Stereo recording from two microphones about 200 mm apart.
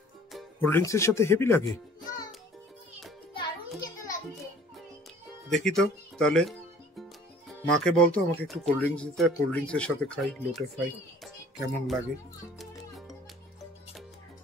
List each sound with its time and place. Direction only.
0.3 s music: centre (ahead or behind)
0.7 s speech: 15° left (ahead or behind)
3.3 s music: 20° left (ahead or behind)
5.7 s speech: centre (ahead or behind)
11.2 s a sound: centre (ahead or behind)